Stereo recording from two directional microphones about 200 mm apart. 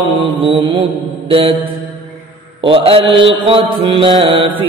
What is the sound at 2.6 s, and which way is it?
Mantra, 25° right (ahead or behind).